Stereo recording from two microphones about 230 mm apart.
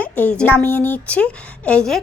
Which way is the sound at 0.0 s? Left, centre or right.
Centre.